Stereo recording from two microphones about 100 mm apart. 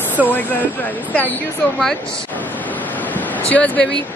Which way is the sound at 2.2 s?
15° left (ahead or behind).